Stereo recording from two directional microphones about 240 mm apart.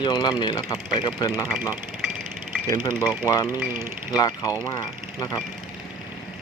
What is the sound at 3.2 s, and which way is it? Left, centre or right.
Speech, centre.